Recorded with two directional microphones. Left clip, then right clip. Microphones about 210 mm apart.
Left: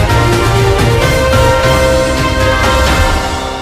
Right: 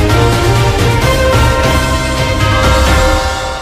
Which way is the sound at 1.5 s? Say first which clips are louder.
Left 3 dB; centre (ahead or behind).